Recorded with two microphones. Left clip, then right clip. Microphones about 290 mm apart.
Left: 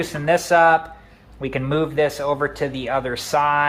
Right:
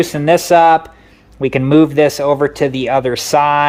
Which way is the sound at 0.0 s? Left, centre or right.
Right.